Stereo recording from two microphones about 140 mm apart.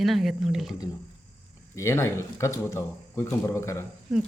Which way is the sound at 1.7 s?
20° left (ahead or behind).